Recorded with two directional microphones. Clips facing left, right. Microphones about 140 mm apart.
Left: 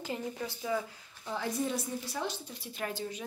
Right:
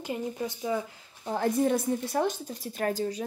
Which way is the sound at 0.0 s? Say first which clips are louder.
Right 5 dB; 15° right (ahead or behind).